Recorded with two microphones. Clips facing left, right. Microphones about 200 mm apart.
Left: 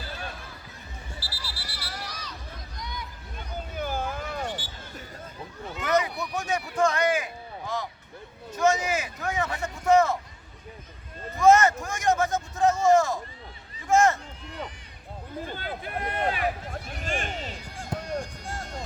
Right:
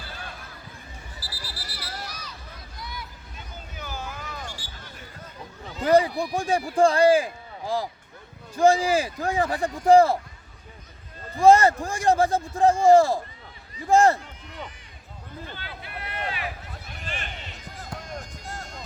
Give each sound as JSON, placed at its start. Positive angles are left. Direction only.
{"t": 1.2, "sound": "a sound", "side_deg": 25}
{"t": 2.0, "sound": "run", "side_deg": -10}
{"t": 3.8, "sound": "a sound", "side_deg": 55}
{"t": 5.8, "sound": "a man's voice", "side_deg": -30}
{"t": 11.3, "sound": "a man's voice", "side_deg": -30}
{"t": 15.4, "sound": "speech", "side_deg": 45}
{"t": 17.9, "sound": "basketball bounce", "side_deg": 25}